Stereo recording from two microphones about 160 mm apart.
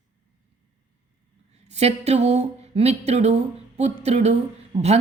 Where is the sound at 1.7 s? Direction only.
40° right (ahead or behind).